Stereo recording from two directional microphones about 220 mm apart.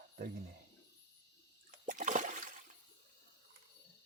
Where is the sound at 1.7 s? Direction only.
35° right (ahead or behind).